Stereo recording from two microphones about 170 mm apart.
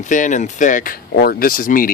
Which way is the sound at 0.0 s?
45° left (ahead or behind).